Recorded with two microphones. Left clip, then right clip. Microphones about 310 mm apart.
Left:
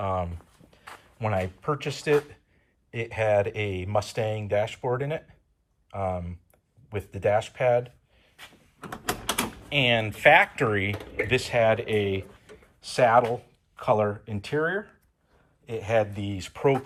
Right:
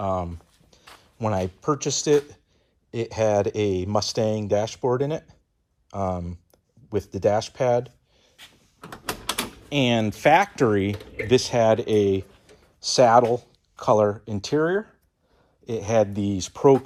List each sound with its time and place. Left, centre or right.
0.0 s a sound: centre
1.6 s speech: centre
9.3 s speech: centre
10.9 s speech: centre
11.3 s speech: centre